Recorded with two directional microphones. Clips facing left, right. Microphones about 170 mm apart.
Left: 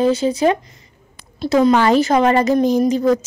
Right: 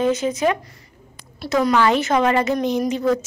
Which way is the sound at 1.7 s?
35° left (ahead or behind).